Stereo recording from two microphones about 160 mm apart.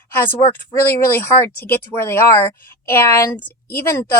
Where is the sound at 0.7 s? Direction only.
15° left (ahead or behind).